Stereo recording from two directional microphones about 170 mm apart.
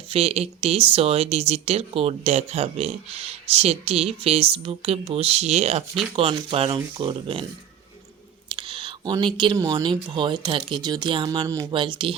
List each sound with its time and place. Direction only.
0.1 s speech: 35° right (ahead or behind)
8.5 s speech: 30° right (ahead or behind)